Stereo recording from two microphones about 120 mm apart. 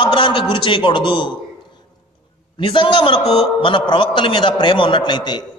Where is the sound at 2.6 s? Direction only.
45° left (ahead or behind).